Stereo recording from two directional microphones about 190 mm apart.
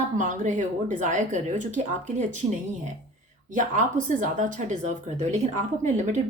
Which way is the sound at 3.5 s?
40° right (ahead or behind).